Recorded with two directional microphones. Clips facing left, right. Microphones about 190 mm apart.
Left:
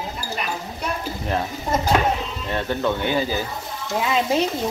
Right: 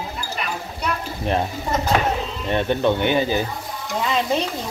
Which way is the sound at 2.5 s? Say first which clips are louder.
Right 4 dB; 20° right (ahead or behind).